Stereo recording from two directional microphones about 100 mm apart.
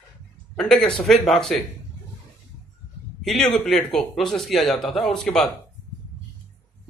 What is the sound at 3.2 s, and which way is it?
A man's voice, 5° left (ahead or behind).